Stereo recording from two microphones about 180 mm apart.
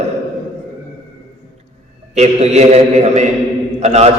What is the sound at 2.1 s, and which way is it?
A man's voice, 35° right (ahead or behind).